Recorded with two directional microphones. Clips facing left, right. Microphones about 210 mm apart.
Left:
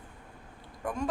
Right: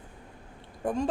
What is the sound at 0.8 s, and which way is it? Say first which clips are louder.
Speech: right 4 dB; 30° right (ahead or behind).